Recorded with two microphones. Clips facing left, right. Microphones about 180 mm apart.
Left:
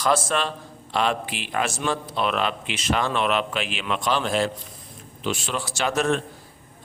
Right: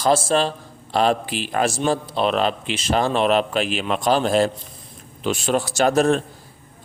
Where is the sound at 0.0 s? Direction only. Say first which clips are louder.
Right 4 dB; 30° right (ahead or behind).